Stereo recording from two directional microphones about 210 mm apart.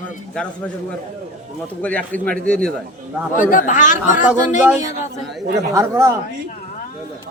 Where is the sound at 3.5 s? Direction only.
40° left (ahead or behind).